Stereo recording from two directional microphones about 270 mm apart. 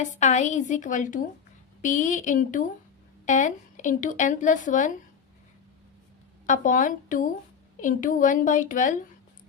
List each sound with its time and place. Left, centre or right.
0.0 s speech: left
6.4 s a woman's voice: left